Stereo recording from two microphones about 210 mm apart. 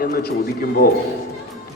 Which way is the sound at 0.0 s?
45° left (ahead or behind).